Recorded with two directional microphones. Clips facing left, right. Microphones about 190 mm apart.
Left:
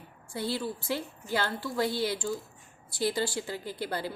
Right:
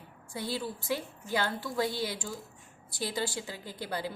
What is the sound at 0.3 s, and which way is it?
A woman's voice, 15° right (ahead or behind).